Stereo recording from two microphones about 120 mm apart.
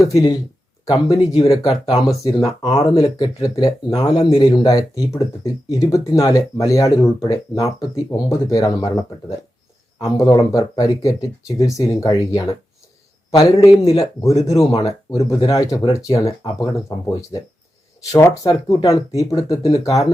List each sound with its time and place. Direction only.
0.0 s speech: 30° left (ahead or behind)
4.1 s a man's voice: 50° left (ahead or behind)
4.4 s speech: 35° left (ahead or behind)
10.0 s speech: 35° left (ahead or behind)
18.4 s speech: 35° left (ahead or behind)